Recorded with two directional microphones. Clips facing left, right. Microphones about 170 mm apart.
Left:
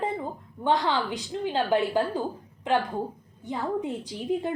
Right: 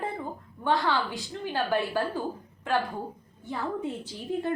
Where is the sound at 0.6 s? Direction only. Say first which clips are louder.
Left 2 dB; 20° left (ahead or behind).